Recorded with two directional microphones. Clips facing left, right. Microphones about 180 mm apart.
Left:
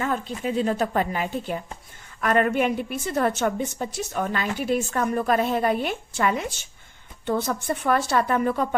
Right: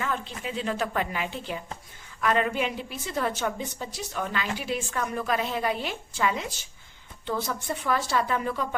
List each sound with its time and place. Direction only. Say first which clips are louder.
0.0 s a woman's voice: left 5 dB; 45° left (ahead or behind)